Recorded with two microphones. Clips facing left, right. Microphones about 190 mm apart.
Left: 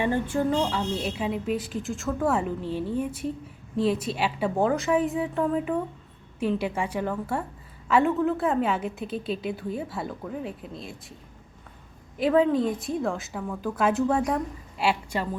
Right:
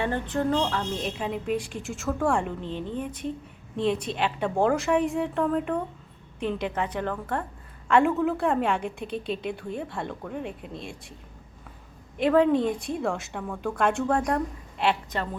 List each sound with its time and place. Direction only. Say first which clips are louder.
0.0 s a woman's voice: left 2 dB; 10° left (ahead or behind)
12.1 s a woman's voice: right 1 dB; centre (ahead or behind)